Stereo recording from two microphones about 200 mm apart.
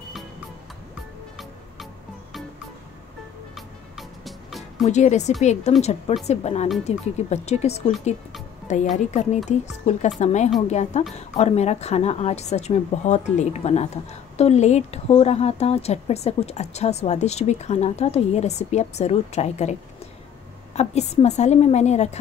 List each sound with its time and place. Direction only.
3.5 s music: centre (ahead or behind)
4.8 s speech: 35° left (ahead or behind)
20.7 s speech: 35° left (ahead or behind)